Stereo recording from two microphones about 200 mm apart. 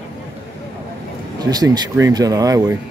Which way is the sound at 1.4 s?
20° right (ahead or behind).